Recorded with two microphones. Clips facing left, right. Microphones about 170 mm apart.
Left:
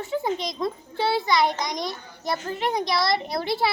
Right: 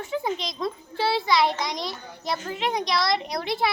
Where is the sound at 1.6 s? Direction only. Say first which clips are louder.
Left 1 dB; 25° right (ahead or behind).